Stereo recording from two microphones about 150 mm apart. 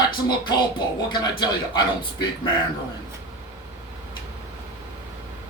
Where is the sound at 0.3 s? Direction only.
30° left (ahead or behind).